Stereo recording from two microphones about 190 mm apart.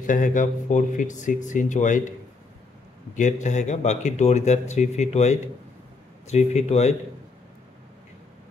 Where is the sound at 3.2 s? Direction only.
40° left (ahead or behind).